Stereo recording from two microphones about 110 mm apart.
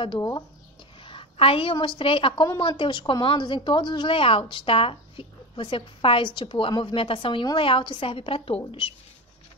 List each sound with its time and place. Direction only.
0.0 s a woman's voice: 45° left (ahead or behind)